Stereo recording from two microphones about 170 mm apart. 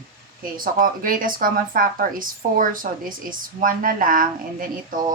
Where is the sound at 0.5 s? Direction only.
55° right (ahead or behind).